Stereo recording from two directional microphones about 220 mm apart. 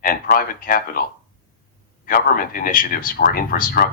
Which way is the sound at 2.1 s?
40° left (ahead or behind).